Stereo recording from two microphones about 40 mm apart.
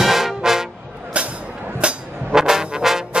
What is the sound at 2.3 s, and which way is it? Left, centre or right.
Trombone, centre.